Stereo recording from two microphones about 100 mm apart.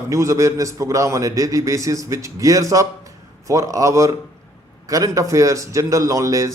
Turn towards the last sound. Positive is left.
turn(degrees=-35)  # may be behind; listen again after turning